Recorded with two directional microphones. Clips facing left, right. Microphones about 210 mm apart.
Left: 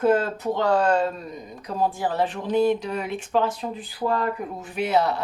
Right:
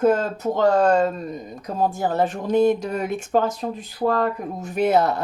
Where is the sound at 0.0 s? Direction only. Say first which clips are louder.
Right 2 dB; 45° right (ahead or behind).